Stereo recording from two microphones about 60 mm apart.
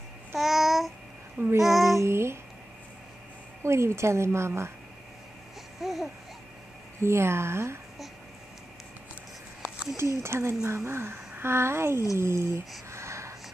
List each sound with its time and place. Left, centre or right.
0.4 s babbling: centre
1.6 s child singing: centre
2.0 s a sound: right
3.6 s speech: right
5.8 s babbling: centre
7.0 s speech: right
9.9 s speech: right
12.9 s a sound: right